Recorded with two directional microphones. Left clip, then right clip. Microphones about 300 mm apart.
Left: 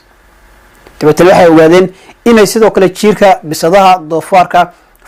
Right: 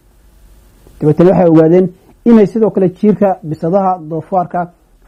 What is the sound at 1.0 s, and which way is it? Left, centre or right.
A man's voice, centre.